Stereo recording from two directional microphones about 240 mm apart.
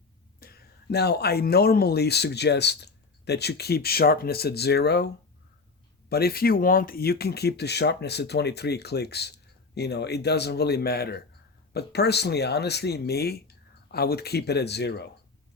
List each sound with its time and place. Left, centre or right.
0.3 s speech: left